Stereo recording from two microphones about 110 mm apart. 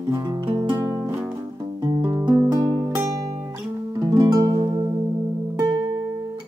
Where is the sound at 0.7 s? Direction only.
30° right (ahead or behind).